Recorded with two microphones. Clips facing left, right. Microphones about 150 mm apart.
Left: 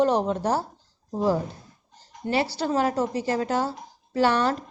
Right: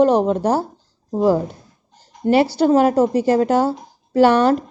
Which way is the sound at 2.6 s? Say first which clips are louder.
Right 10 dB; 50° right (ahead or behind).